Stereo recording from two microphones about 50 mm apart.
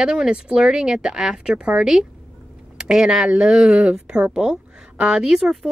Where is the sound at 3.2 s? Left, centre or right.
Centre.